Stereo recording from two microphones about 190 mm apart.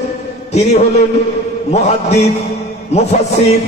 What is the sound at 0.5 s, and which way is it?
A man's voice, 35° left (ahead or behind).